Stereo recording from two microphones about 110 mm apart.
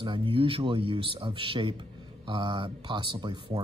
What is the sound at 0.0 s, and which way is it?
Speech, 50° right (ahead or behind).